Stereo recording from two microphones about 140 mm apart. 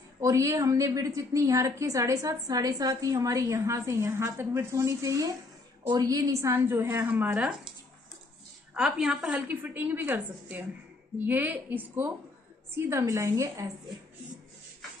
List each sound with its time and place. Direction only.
0.2 s a woman's voice: 25° right (ahead or behind); by 7.5 s 10° right (ahead or behind)
8.7 s a woman's voice: 5° right (ahead or behind); by 13.7 s 25° right (ahead or behind)